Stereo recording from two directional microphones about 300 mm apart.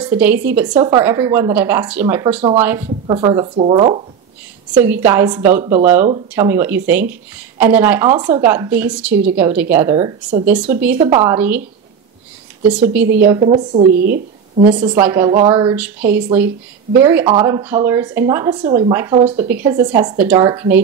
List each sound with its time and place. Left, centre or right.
0.0 s speech: centre
4.8 s speech: centre
11.0 s a woman's voice: centre
11.3 s speech: centre
12.9 s speech: centre
13.4 s a woman's voice: right
14.9 s speech: centre